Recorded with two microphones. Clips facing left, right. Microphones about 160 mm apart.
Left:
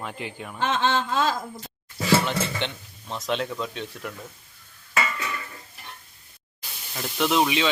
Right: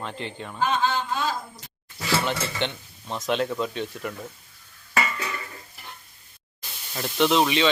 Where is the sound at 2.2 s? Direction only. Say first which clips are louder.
Even; centre (ahead or behind).